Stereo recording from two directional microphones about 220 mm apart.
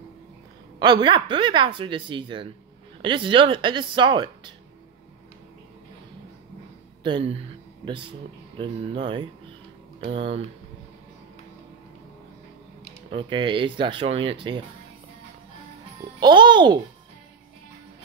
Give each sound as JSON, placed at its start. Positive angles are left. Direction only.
{"t": 0.7, "sound": "speech", "side_deg": -20}
{"t": 7.0, "sound": "speech", "side_deg": -20}
{"t": 13.1, "sound": "speech", "side_deg": -20}
{"t": 16.2, "sound": "speech", "side_deg": -20}